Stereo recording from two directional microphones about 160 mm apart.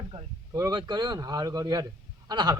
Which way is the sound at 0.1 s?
25° right (ahead or behind).